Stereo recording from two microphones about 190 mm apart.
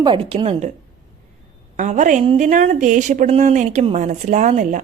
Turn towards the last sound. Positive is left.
turn(degrees=-40)  # may be behind; listen again after turning